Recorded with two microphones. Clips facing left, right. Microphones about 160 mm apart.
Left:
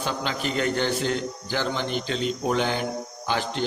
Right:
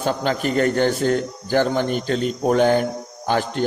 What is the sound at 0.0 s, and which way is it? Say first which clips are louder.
A man's voice: right 7 dB; 45° right (ahead or behind).